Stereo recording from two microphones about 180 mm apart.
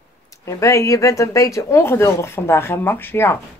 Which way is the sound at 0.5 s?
15° left (ahead or behind).